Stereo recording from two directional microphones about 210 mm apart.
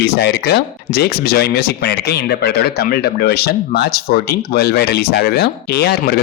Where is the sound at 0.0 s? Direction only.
50° left (ahead or behind).